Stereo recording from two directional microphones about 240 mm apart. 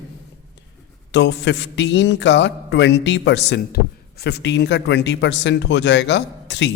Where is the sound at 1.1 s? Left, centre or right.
Left.